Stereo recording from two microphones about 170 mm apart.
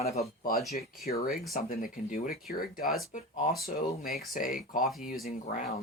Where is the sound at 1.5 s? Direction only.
55° left (ahead or behind).